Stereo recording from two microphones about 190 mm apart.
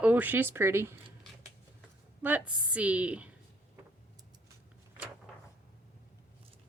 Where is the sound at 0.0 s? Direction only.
10° right (ahead or behind).